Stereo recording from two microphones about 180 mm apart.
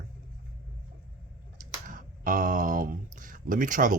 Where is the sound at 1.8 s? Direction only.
45° right (ahead or behind).